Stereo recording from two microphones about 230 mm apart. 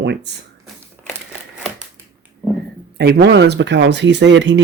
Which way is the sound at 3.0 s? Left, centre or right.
Right.